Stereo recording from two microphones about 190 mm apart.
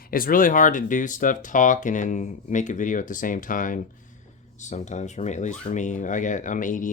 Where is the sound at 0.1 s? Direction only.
50° left (ahead or behind).